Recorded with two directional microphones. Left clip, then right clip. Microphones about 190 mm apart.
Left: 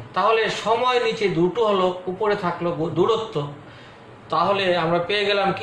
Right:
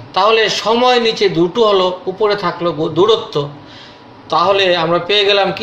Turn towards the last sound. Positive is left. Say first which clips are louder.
# right 8 dB
turn(degrees=-40)  # may be behind; listen again after turning